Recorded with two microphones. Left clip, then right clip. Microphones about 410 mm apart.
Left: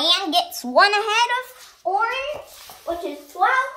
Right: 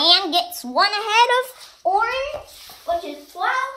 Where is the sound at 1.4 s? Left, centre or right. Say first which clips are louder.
Right 5 dB; centre.